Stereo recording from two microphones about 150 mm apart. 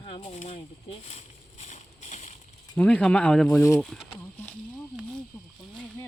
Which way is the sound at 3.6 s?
20° left (ahead or behind).